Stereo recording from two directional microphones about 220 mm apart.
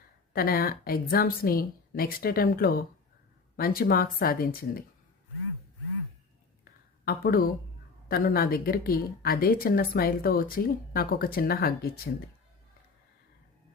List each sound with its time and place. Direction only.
0.3 s a woman's voice: 40° left (ahead or behind)
7.0 s a woman's voice: 40° left (ahead or behind)